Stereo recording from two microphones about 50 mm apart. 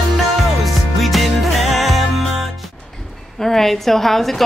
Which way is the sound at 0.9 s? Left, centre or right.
Centre.